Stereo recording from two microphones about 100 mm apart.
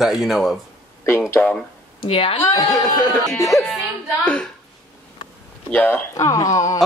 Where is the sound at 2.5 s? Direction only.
35° left (ahead or behind).